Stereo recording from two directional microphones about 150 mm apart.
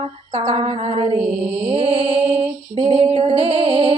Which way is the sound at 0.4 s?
40° right (ahead or behind).